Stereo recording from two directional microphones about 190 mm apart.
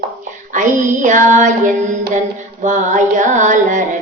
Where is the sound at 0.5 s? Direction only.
40° right (ahead or behind).